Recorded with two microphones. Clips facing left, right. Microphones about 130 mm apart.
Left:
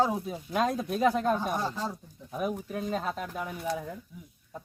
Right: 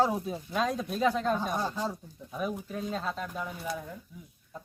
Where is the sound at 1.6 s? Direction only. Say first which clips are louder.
Even; 15° right (ahead or behind).